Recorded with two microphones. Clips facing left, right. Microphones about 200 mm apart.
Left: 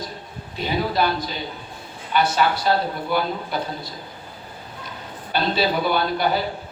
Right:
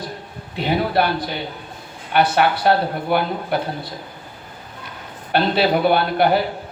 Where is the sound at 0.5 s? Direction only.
60° right (ahead or behind).